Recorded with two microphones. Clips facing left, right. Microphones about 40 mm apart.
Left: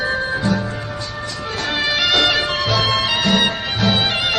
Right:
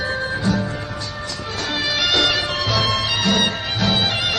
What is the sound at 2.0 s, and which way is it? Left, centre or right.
Music, centre.